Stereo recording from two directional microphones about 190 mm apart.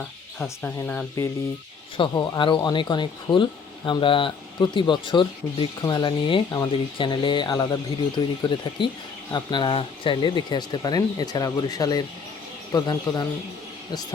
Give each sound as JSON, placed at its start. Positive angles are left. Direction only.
{"t": 0.4, "sound": "speech", "side_deg": 10}
{"t": 2.0, "sound": "speech", "side_deg": 25}